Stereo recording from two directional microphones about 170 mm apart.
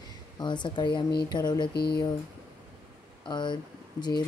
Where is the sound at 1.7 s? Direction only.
70° left (ahead or behind).